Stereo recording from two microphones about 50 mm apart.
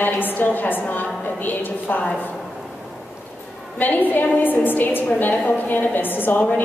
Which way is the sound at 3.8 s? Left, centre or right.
Left.